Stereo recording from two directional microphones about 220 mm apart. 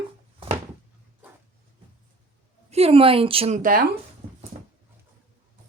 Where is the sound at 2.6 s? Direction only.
25° right (ahead or behind).